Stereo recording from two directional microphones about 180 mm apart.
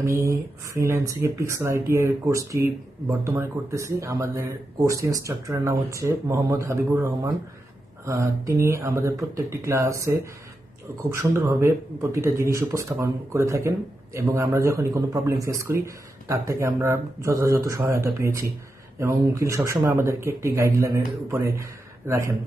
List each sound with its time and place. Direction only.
0.0 s speech: 15° right (ahead or behind)